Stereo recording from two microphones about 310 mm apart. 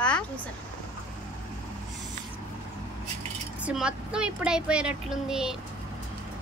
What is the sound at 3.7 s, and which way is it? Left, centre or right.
Speech, centre.